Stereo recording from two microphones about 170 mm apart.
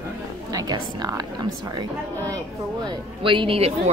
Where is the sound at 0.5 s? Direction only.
25° right (ahead or behind).